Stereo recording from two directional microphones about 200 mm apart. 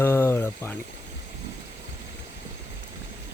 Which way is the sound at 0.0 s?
10° left (ahead or behind).